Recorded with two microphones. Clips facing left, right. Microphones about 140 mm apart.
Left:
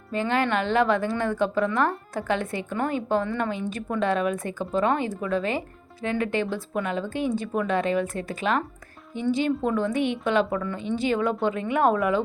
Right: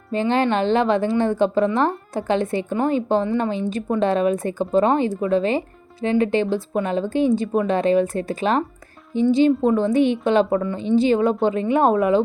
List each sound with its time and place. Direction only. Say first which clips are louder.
0.1 s a woman's voice: right 5 dB; 25° right (ahead or behind)